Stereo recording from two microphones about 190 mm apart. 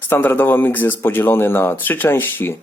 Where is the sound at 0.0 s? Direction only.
10° left (ahead or behind).